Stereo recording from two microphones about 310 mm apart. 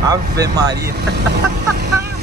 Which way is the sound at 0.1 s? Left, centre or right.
Centre.